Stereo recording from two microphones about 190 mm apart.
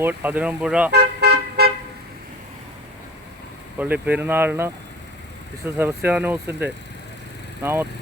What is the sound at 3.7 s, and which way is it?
Speech, 10° right (ahead or behind).